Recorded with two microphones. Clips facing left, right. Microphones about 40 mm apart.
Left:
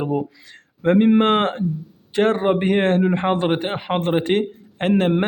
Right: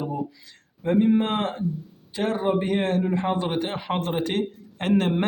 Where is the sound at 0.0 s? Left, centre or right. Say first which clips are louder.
Left 6 dB; left.